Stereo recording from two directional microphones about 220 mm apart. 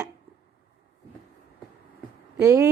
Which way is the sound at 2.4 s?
15° right (ahead or behind).